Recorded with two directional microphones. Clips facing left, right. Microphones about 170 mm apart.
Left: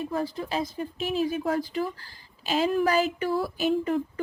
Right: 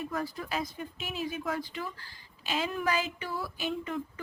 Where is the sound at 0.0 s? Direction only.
30° left (ahead or behind).